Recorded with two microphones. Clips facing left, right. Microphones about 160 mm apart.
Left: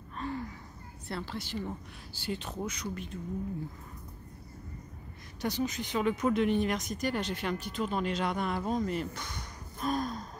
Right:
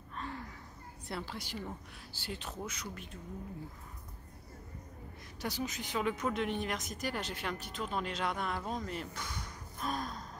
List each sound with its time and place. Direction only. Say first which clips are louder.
0.1 s a sound: left 6 dB; 5° left (ahead or behind)
1.0 s a woman's voice: left 3 dB; 10° right (ahead or behind)
5.4 s speech: left 6 dB; 5° right (ahead or behind)